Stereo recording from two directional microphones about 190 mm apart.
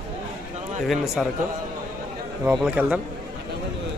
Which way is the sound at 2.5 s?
5° right (ahead or behind).